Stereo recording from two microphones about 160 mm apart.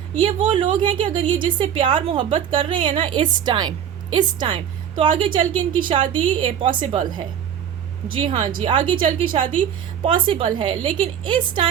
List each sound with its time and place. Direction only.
0.2 s a woman's voice: 30° right (ahead or behind)
8.1 s a woman's voice: 35° right (ahead or behind)